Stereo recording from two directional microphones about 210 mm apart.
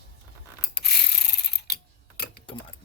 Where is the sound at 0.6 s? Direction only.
50° left (ahead or behind).